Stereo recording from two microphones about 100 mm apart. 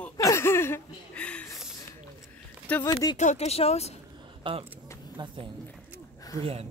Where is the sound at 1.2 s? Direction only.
10° left (ahead or behind).